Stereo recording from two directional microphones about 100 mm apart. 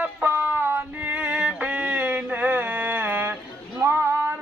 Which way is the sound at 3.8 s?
25° right (ahead or behind).